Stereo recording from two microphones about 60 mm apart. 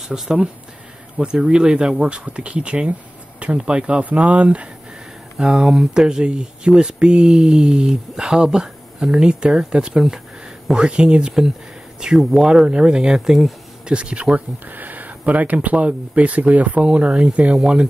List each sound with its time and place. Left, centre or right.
0.1 s speech: centre